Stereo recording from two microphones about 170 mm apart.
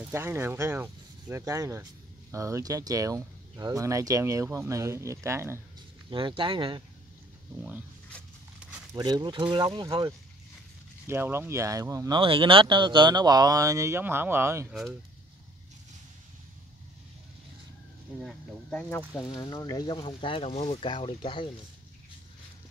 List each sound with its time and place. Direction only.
0.1 s speech: 15° right (ahead or behind)
6.0 s speech: 30° right (ahead or behind)
8.9 s speech: 25° right (ahead or behind)
11.1 s speech: 15° right (ahead or behind)
12.2 s speech: 30° right (ahead or behind); by 14.7 s 15° right (ahead or behind)
14.7 s speech: centre (ahead or behind)
18.2 s speech: 5° left (ahead or behind)
19.4 s speech: 25° left (ahead or behind)